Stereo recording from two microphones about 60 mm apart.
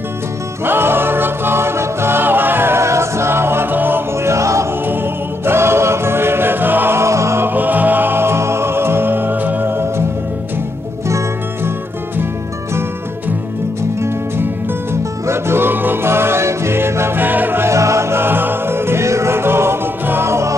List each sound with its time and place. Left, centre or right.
0.7 s music: right
4.3 s music: right
5.4 s choir: right
7.0 s music: right
7.4 s music: right
15.2 s music: right
17.2 s music: right
17.6 s music: right